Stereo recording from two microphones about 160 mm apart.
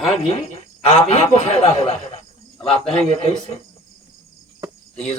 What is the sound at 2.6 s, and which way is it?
Speech, 40° left (ahead or behind).